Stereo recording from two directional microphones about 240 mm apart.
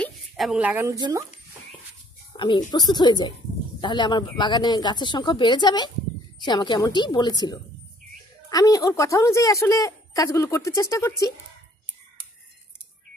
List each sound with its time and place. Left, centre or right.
0.0 s a woman's voice: centre
2.3 s a woman's voice: centre